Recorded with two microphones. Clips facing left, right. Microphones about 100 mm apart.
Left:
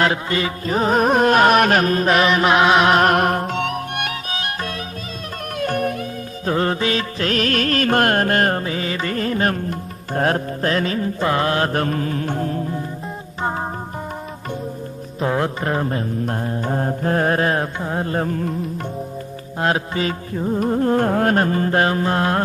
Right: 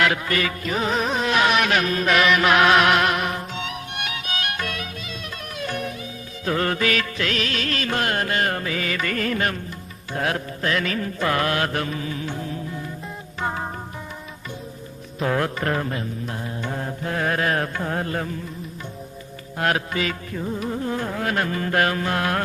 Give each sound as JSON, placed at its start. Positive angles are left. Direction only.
{"t": 0.0, "sound": "music", "side_deg": 25}
{"t": 0.7, "sound": "music", "side_deg": 40}
{"t": 4.3, "sound": "music", "side_deg": 30}
{"t": 5.5, "sound": "music", "side_deg": 50}
{"t": 6.4, "sound": "music", "side_deg": 30}
{"t": 7.3, "sound": "music", "side_deg": 45}
{"t": 8.5, "sound": "music", "side_deg": 30}
{"t": 9.5, "sound": "music", "side_deg": 45}
{"t": 15.2, "sound": "music", "side_deg": 25}
{"t": 18.1, "sound": "music", "side_deg": 40}
{"t": 19.5, "sound": "music", "side_deg": 25}
{"t": 20.6, "sound": "music", "side_deg": 45}